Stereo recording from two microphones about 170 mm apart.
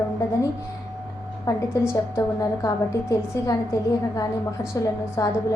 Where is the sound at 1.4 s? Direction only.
20° left (ahead or behind).